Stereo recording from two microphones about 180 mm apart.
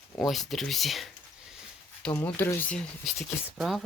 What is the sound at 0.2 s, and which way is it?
Speech, centre (ahead or behind).